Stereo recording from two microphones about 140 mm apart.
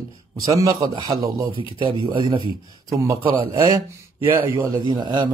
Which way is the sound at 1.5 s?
35° right (ahead or behind).